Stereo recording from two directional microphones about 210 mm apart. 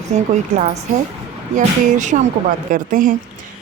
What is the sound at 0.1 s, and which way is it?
Speech, 30° right (ahead or behind).